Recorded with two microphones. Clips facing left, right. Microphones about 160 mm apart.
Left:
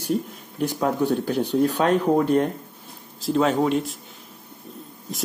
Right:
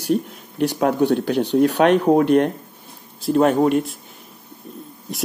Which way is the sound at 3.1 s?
55° right (ahead or behind).